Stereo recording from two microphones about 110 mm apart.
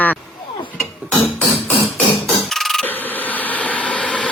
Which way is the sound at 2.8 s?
15° left (ahead or behind).